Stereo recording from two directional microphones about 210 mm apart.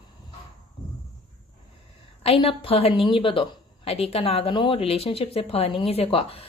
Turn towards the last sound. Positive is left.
turn(degrees=30)  # may be behind; listen again after turning